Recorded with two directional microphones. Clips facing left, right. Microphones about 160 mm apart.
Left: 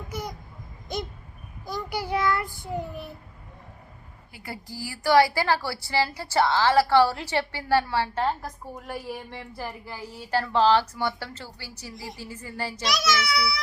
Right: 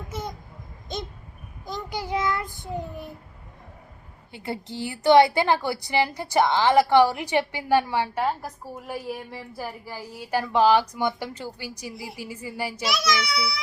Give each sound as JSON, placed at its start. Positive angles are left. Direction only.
{"t": 0.1, "sound": "a sound", "side_deg": -25}
{"t": 1.6, "sound": "child singing", "side_deg": -20}
{"t": 4.3, "sound": "a woman's voice", "side_deg": -25}